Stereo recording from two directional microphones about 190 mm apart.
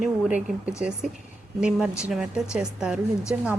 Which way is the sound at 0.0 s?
5° right (ahead or behind).